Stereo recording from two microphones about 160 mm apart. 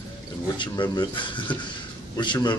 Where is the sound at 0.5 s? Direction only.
25° left (ahead or behind).